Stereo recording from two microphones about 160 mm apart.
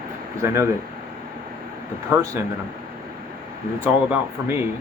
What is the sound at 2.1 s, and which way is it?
Speech, 15° right (ahead or behind).